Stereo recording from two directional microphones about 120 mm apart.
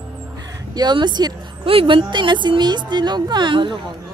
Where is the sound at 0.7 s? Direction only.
35° right (ahead or behind).